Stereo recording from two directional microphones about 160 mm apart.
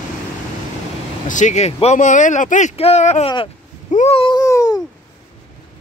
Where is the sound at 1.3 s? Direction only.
50° left (ahead or behind); by 4.8 s 20° left (ahead or behind).